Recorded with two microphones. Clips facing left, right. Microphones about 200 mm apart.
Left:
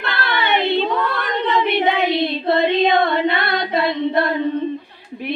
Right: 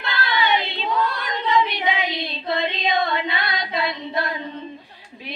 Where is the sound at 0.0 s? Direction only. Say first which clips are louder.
Left 1 dB; 60° left (ahead or behind).